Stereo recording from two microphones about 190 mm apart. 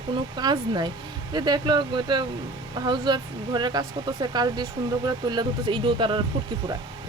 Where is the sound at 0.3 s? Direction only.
20° right (ahead or behind).